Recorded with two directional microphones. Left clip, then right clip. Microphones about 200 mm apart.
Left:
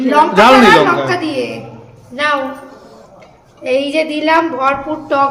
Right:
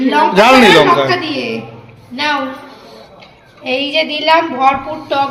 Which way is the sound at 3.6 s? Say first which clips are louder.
Left 1 dB; 30° left (ahead or behind).